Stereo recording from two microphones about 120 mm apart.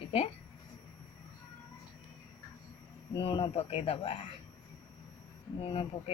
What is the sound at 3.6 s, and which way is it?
Speech, 55° left (ahead or behind).